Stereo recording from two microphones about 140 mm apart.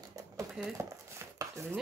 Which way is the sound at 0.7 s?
20° right (ahead or behind).